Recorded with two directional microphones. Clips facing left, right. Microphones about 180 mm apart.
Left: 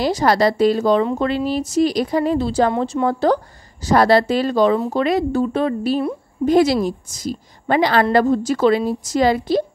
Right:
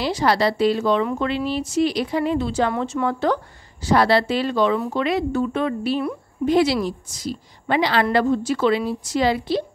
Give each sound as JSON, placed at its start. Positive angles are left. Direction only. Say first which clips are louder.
{"t": 0.0, "sound": "a woman's voice", "louder": "left 3 dB", "side_deg": 45}